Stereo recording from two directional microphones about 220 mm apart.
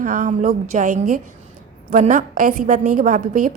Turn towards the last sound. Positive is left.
turn(degrees=-35)  # may be behind; listen again after turning